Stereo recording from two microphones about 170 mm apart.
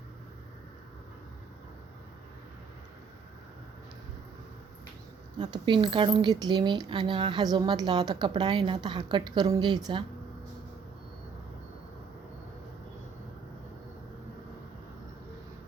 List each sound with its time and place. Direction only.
5.4 s a woman's voice: 30° right (ahead or behind)